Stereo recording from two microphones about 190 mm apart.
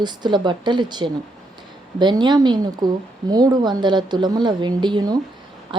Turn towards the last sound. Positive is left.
turn(degrees=-25)  # may be behind; listen again after turning